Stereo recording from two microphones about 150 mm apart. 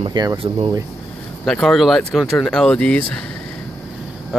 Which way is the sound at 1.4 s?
Centre (ahead or behind).